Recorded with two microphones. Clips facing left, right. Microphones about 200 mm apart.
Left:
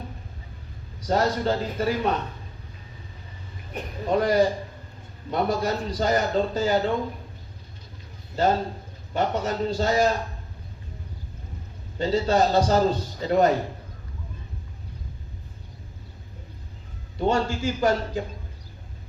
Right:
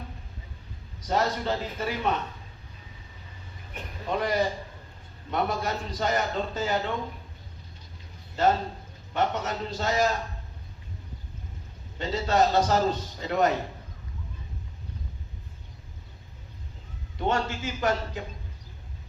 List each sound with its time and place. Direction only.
1.0 s a man's voice: 35° left (ahead or behind)
4.1 s a man's voice: 35° left (ahead or behind)
9.1 s a man's voice: 35° left (ahead or behind)
11.9 s a man's voice: 35° left (ahead or behind)
17.2 s a man's voice: 35° left (ahead or behind)